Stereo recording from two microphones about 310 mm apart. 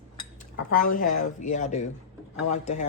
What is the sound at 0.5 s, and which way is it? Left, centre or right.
Speech, left.